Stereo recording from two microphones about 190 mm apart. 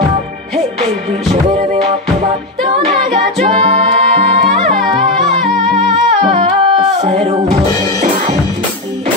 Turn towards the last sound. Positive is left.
turn(degrees=-35)  # may be behind; listen again after turning